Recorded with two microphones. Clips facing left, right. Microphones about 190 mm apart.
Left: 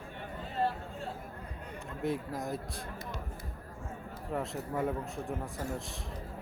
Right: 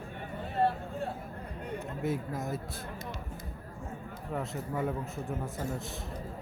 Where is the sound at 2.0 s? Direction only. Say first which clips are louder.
Left 1 dB; 5° right (ahead or behind).